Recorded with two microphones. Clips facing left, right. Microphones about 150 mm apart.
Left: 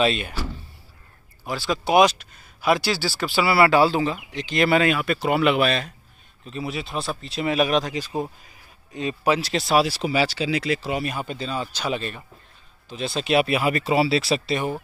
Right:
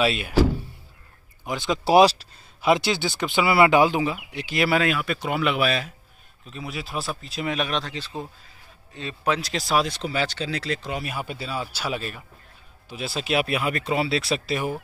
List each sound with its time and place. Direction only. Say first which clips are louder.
0.0 s speech: left 2 dB; 5° right (ahead or behind)
1.4 s speech: even; 20° right (ahead or behind)
1.9 s speech: right 1 dB; 30° right (ahead or behind); by 14.8 s 5° right (ahead or behind)